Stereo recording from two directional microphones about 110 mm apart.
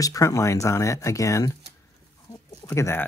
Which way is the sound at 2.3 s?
30° left (ahead or behind).